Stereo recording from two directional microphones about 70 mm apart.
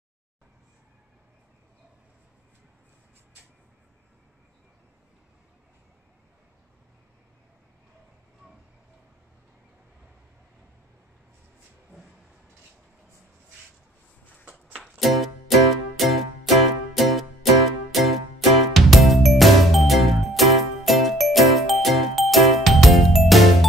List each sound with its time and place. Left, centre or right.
14.8 s music: centre